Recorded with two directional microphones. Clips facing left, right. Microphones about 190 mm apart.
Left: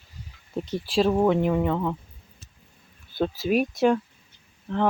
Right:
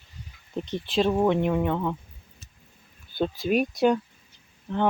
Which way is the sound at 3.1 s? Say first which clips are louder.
Left 1 dB; centre (ahead or behind).